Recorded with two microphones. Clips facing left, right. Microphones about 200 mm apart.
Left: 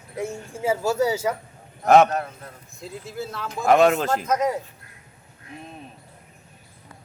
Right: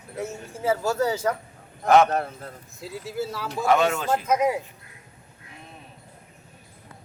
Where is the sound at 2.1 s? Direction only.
30° right (ahead or behind).